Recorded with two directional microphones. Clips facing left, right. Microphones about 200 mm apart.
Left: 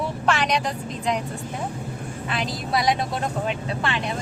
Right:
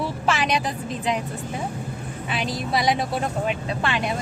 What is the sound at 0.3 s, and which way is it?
Vehicle, 5° right (ahead or behind).